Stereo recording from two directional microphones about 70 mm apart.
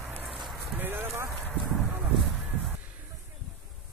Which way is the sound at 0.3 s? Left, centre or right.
Centre.